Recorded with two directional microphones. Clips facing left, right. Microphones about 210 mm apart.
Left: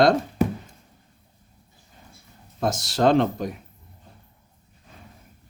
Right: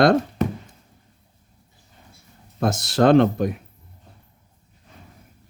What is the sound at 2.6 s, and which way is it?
Speech, 60° right (ahead or behind).